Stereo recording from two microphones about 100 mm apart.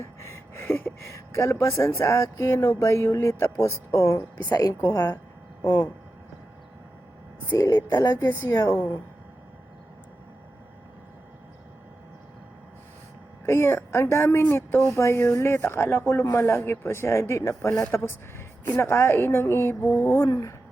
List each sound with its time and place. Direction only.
0.0 s speech: 25° left (ahead or behind)
4.4 s speech: 45° left (ahead or behind)
7.5 s speech: 35° left (ahead or behind)
8.3 s speech: 25° left (ahead or behind)
13.4 s speech: 25° left (ahead or behind)